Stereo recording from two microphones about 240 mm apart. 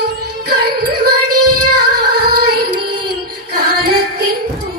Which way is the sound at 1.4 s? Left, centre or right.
Right.